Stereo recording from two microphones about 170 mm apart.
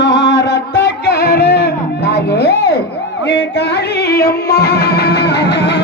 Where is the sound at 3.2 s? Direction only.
90° left.